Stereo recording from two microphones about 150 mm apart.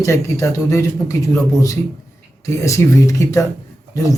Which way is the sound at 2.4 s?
20° left (ahead or behind).